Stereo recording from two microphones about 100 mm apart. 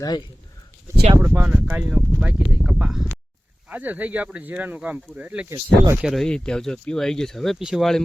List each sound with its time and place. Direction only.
1.1 s speech: 30° right (ahead or behind)
1.4 s speech: 15° right (ahead or behind)
5.5 s speech: 30° right (ahead or behind)
6.0 s speech: 5° right (ahead or behind)
6.2 s speech: 10° left (ahead or behind)